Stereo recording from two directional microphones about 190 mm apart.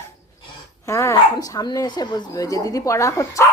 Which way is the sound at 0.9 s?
15° left (ahead or behind).